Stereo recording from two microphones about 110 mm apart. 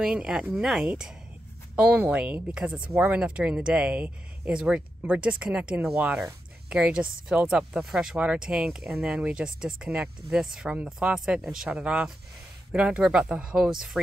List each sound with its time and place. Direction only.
0.0 s speech: 5° right (ahead or behind)